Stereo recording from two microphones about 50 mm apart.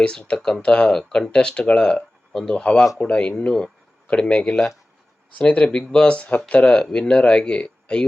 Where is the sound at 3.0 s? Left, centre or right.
Left.